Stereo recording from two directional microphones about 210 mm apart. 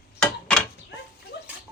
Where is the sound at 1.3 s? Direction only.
55° left (ahead or behind).